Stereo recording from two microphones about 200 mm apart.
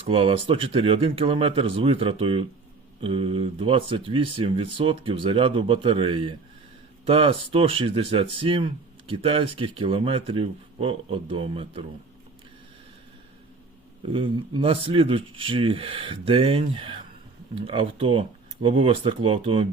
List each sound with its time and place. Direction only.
0.1 s speech: 30° right (ahead or behind)
14.1 s speech: 25° right (ahead or behind)